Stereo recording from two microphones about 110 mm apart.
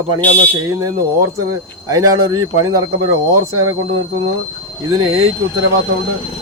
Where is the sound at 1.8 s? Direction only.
30° right (ahead or behind).